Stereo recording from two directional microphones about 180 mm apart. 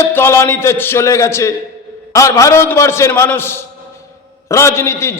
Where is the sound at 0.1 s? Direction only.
15° left (ahead or behind).